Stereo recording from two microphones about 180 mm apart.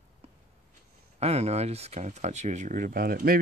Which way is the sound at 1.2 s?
35° right (ahead or behind).